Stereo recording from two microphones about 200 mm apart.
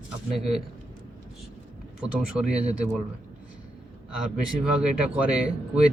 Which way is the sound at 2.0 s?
5° right (ahead or behind).